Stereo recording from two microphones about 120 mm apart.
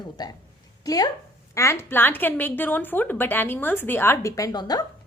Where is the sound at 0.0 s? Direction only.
35° left (ahead or behind).